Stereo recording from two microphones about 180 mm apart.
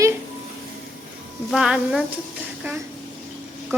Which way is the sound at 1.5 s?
Centre (ahead or behind).